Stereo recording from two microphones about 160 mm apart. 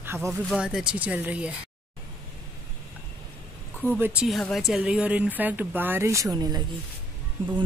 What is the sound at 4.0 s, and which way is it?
Speech, 10° right (ahead or behind).